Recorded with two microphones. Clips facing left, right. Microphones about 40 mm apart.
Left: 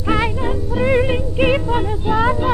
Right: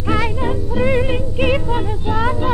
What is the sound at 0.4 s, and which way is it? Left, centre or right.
Music, centre.